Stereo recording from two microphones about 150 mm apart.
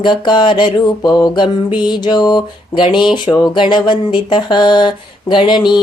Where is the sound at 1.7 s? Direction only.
30° left (ahead or behind).